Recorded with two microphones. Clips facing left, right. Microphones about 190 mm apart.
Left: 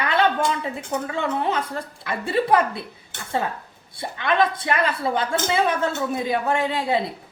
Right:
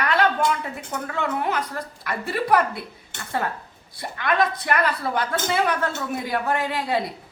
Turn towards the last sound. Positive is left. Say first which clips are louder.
# left 2 dB
turn(degrees=25)  # may be behind; listen again after turning